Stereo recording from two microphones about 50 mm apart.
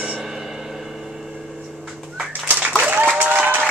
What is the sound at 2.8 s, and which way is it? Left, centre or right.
Applause, right.